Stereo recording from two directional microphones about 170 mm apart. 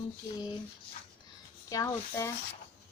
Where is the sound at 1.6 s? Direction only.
20° left (ahead or behind).